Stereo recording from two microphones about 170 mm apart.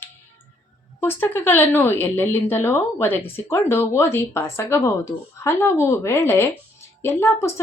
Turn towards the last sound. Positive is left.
turn(degrees=15)  # may be behind; listen again after turning